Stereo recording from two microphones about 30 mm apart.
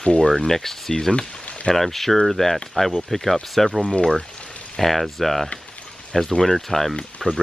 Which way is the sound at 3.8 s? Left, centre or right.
Left.